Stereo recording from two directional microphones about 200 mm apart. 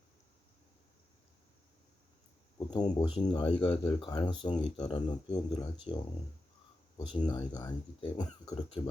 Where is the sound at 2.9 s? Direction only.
20° left (ahead or behind).